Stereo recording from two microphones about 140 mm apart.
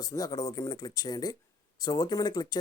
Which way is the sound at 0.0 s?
25° left (ahead or behind).